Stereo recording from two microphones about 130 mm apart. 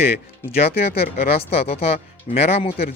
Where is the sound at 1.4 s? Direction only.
50° left (ahead or behind).